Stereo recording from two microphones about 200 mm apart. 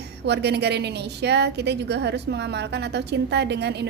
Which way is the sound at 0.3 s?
55° right (ahead or behind).